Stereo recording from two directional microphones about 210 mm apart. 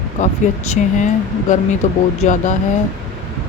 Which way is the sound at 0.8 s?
35° left (ahead or behind).